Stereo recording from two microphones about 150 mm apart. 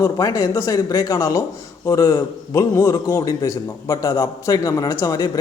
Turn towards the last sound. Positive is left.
turn(degrees=25)  # may be behind; listen again after turning